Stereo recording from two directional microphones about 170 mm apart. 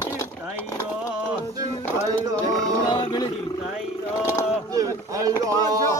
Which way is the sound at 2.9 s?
25° left (ahead or behind).